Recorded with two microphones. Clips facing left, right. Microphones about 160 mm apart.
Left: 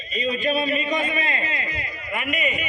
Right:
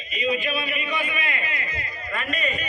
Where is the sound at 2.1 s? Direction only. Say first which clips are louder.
Left 2 dB; 15° left (ahead or behind).